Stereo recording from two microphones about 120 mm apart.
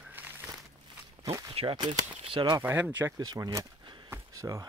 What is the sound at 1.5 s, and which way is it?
Speech, 45° right (ahead or behind).